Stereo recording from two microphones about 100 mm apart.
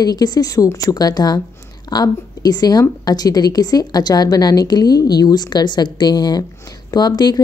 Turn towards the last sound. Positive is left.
turn(degrees=45)  # may be behind; listen again after turning